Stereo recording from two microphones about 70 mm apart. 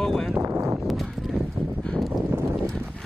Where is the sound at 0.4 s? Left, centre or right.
Right.